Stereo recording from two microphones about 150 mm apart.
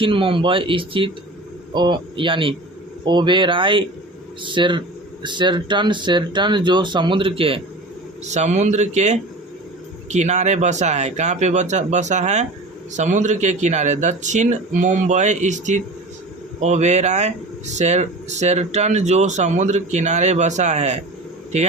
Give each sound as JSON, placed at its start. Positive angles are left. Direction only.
{"t": 0.0, "sound": "speech", "side_deg": -35}
{"t": 8.2, "sound": "speech", "side_deg": -50}